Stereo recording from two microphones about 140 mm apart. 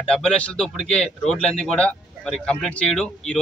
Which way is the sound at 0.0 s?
5° left (ahead or behind).